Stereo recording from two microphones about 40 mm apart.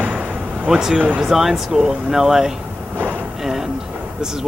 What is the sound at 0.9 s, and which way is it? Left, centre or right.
Speech, right.